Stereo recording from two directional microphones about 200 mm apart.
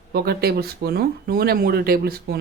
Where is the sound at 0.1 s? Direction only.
50° right (ahead or behind).